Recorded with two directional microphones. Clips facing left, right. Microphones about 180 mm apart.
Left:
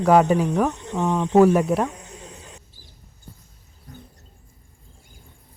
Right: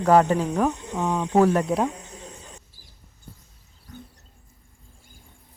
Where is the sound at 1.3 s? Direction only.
10° left (ahead or behind).